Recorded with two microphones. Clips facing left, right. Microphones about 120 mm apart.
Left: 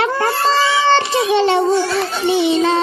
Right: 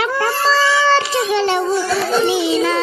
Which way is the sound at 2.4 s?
25° left (ahead or behind).